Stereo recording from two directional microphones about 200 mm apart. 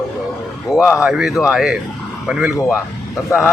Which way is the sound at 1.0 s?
5° right (ahead or behind).